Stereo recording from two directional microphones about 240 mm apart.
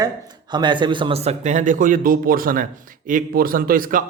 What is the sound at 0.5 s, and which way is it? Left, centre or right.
A man's voice, centre.